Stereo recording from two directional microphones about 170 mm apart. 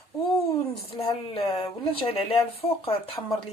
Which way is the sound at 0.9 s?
30° left (ahead or behind).